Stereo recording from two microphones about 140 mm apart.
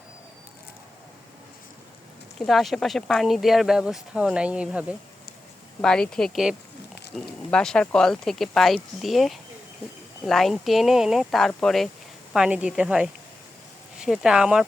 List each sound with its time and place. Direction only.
2.4 s speech: centre (ahead or behind)
5.8 s speech: 5° left (ahead or behind)